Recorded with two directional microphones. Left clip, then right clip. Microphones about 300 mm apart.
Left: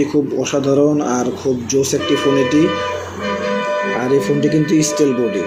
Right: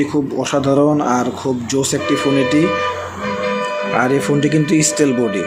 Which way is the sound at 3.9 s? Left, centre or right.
Right.